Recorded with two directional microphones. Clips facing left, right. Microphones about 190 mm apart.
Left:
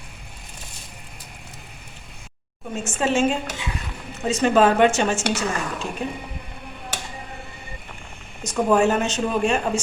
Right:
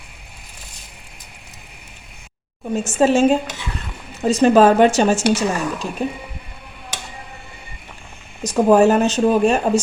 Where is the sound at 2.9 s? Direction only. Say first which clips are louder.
Right 7 dB; 40° right (ahead or behind).